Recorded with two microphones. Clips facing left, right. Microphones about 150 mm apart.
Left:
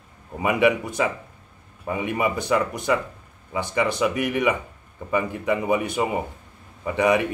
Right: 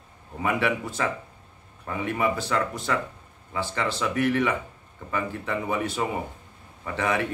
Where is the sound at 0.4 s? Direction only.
15° left (ahead or behind).